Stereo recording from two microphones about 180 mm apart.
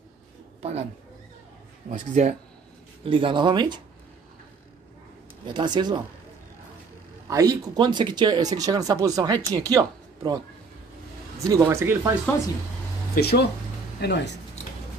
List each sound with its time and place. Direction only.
0.6 s speech: 35° right (ahead or behind)
1.9 s speech: 45° right (ahead or behind)
3.1 s speech: 30° right (ahead or behind)
5.5 s speech: 25° right (ahead or behind)
7.2 s speech: 20° right (ahead or behind)
13.1 s speech: 65° left (ahead or behind)